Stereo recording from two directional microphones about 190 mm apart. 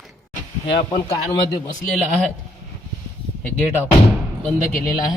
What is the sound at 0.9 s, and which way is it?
Speech, 25° left (ahead or behind).